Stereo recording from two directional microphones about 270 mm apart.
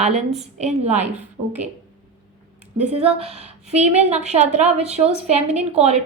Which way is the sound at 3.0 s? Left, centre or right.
Right.